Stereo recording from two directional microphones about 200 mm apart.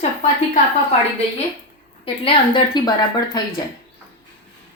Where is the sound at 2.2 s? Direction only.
25° left (ahead or behind).